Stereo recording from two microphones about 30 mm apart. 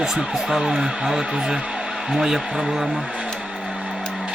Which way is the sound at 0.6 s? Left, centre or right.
Right.